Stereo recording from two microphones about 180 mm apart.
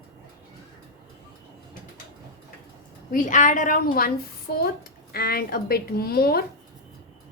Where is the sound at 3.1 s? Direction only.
45° left (ahead or behind).